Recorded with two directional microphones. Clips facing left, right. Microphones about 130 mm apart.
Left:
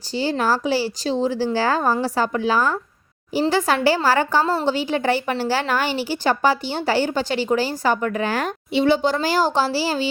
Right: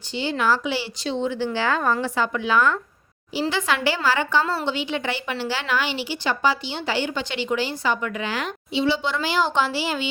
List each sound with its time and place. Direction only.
0.1 s a woman's voice: 40° left (ahead or behind)